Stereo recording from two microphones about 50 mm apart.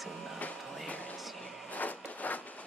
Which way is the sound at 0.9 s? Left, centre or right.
Left.